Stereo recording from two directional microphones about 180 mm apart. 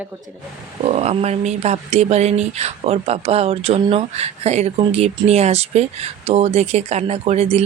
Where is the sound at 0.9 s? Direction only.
35° right (ahead or behind).